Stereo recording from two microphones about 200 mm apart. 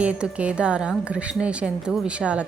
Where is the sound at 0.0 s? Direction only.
5° right (ahead or behind).